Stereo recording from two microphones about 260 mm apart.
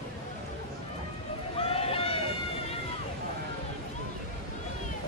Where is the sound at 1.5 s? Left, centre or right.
Left.